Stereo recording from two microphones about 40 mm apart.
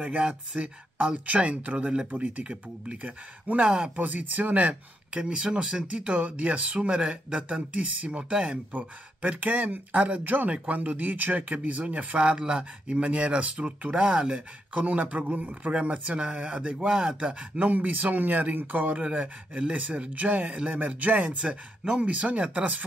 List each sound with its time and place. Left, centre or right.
0.0 s speech: right
5.1 s speech: right
5.9 s speech: right
8.7 s speech: right
17.6 s speech: right
19.0 s speech: right
20.2 s speech: right
21.4 s speech: right